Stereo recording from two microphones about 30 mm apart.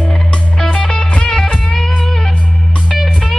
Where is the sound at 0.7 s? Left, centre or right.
Left.